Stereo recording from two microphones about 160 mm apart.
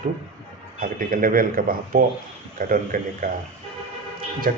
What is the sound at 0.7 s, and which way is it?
Speech, 60° right (ahead or behind).